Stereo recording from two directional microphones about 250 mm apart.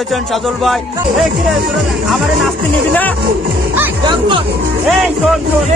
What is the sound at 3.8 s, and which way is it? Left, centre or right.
Speech, centre.